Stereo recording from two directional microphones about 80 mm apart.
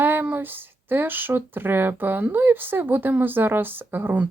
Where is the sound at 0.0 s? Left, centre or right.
Right.